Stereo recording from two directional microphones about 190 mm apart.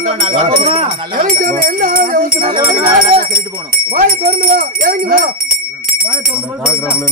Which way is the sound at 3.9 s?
50° right (ahead or behind).